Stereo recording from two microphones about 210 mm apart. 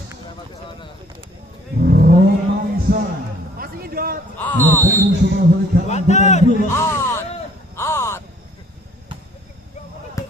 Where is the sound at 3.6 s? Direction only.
45° right (ahead or behind).